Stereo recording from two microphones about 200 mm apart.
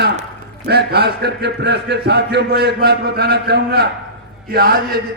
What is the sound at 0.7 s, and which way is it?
A man's voice, 55° right (ahead or behind).